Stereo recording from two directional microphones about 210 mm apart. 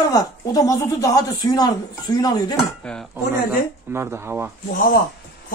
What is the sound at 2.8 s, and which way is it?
Speech, 5° left (ahead or behind).